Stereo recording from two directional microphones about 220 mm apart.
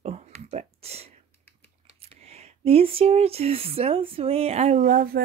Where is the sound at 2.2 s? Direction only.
30° right (ahead or behind).